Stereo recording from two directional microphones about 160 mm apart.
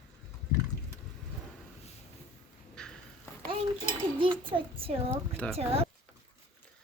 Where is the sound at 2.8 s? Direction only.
5° left (ahead or behind).